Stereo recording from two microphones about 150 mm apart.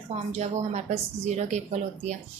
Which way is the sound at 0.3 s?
50° right (ahead or behind).